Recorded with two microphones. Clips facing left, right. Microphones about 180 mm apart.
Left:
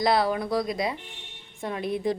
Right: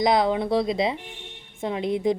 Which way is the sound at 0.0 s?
20° right (ahead or behind).